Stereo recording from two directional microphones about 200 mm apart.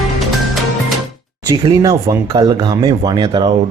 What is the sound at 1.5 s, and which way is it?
A man's voice, 20° right (ahead or behind).